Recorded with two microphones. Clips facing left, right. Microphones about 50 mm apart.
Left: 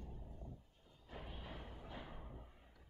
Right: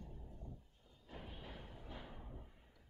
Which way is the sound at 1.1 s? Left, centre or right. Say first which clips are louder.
Left 1 dB; centre.